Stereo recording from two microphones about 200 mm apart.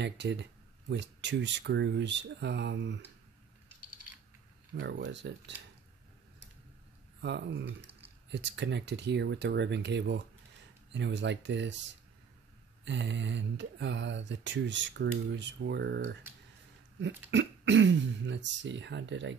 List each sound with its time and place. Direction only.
0.0 s speech: 60° right (ahead or behind)
4.7 s speech: 65° right (ahead or behind)
7.2 s speech: 60° right (ahead or behind)
12.8 s speech: 65° right (ahead or behind)